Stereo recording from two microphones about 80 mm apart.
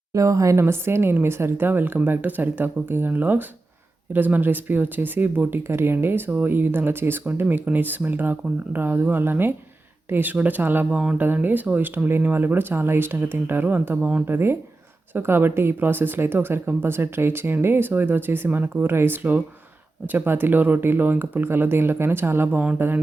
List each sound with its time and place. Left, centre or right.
0.1 s speech: right
0.6 s speech: right